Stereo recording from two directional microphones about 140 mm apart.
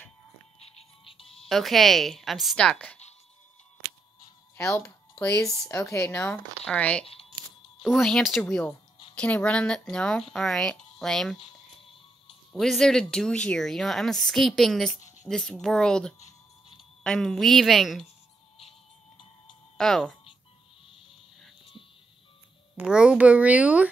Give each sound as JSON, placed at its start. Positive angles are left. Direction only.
{"t": 0.6, "sound": "music", "side_deg": 40}
{"t": 1.5, "sound": "speech", "side_deg": 0}
{"t": 4.6, "sound": "speech", "side_deg": 20}
{"t": 11.4, "sound": "music", "side_deg": 40}
{"t": 12.5, "sound": "speech", "side_deg": 5}
{"t": 19.8, "sound": "speech", "side_deg": 5}
{"t": 22.8, "sound": "speech", "side_deg": -5}